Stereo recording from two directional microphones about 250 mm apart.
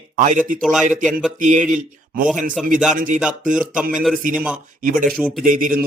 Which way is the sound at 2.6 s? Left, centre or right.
Centre.